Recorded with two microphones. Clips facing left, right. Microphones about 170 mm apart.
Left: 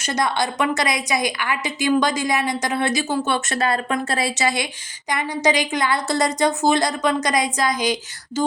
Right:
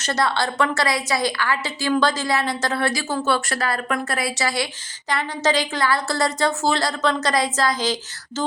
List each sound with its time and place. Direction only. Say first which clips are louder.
0.0 s a woman's voice: even; 15° left (ahead or behind)